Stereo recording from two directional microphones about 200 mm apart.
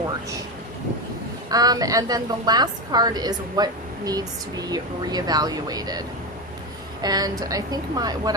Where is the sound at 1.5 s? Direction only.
20° right (ahead or behind).